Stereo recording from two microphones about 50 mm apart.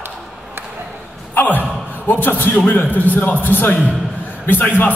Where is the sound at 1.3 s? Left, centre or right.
Left.